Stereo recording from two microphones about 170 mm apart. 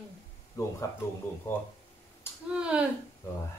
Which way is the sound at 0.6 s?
20° left (ahead or behind).